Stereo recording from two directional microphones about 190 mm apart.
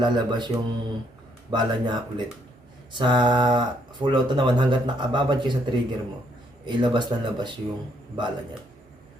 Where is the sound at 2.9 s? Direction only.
25° right (ahead or behind).